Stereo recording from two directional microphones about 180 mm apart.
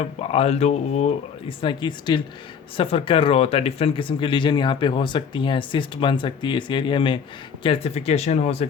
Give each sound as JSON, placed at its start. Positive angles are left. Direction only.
{"t": 0.0, "sound": "speech", "side_deg": 35}